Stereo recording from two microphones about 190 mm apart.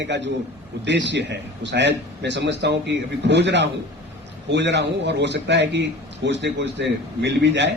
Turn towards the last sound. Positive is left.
turn(degrees=-65)  # may be behind; listen again after turning